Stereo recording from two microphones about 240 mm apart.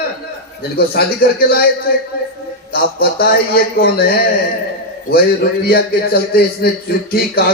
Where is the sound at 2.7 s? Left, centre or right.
Left.